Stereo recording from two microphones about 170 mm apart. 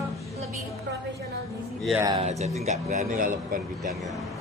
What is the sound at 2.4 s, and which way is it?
Speech, 40° right (ahead or behind).